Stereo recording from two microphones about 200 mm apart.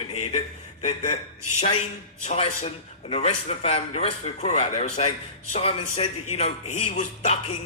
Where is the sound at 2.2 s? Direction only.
35° left (ahead or behind).